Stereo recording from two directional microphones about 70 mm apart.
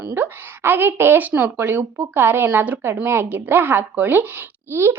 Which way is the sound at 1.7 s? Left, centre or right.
Right.